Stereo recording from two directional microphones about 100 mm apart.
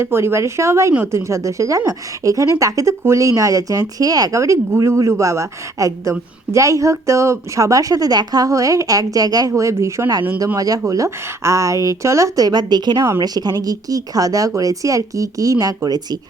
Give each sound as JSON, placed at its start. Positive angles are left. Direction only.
{"t": 0.0, "sound": "a woman's voice", "side_deg": -25}